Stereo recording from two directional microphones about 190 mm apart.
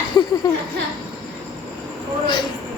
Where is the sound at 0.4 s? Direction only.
20° left (ahead or behind).